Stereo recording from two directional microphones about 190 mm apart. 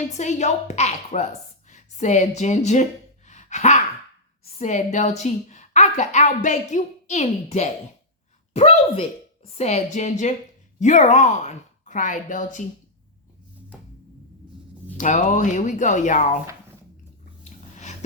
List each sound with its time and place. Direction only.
0.1 s a woman's voice: 40° left (ahead or behind)
3.2 s gasp: 40° left (ahead or behind)
4.4 s a woman's voice: 35° left (ahead or behind)
14.9 s a woman's voice: 40° left (ahead or behind)
17.4 s a sound: 35° left (ahead or behind)